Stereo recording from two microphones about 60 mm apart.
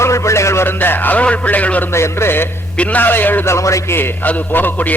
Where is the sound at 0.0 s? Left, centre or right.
Left.